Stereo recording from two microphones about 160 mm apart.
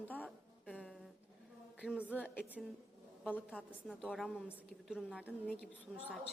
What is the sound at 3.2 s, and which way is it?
A woman's voice, 5° left (ahead or behind).